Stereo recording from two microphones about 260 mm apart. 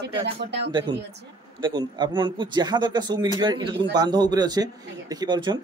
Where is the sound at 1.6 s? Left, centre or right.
Centre.